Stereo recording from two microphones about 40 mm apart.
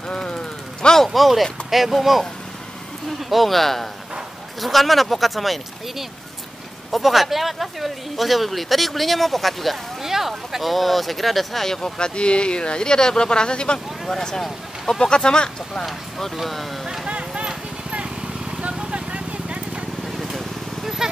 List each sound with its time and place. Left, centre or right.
0.1 s a sound: left
1.0 s speech: centre
3.3 s speech: centre
10.0 s speech: centre; by 13.7 s left
14.0 s speech: centre
16.3 s speech: centre
16.8 s clip-clop: centre
17.1 s clip-clop: right
17.9 s vehicle: right
20.1 s vehicle: centre